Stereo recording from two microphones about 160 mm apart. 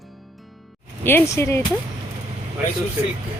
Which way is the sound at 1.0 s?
15° left (ahead or behind).